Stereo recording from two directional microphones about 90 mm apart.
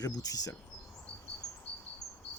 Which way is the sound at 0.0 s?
45° left (ahead or behind).